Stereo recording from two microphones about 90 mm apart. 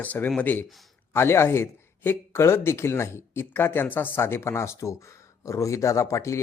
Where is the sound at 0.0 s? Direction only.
20° left (ahead or behind).